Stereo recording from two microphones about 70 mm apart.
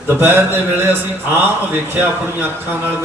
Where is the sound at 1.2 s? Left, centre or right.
Right.